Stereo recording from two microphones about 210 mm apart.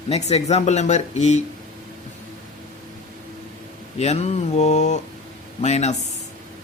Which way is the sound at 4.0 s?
30° left (ahead or behind).